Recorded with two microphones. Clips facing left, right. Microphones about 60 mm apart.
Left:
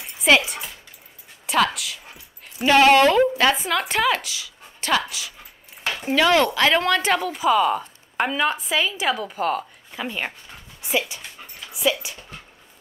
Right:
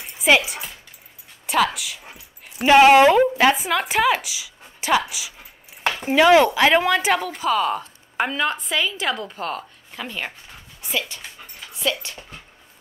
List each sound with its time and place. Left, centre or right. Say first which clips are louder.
0.2 s a woman's voice: even; centre
2.6 s a woman's voice: right 3 dB; centre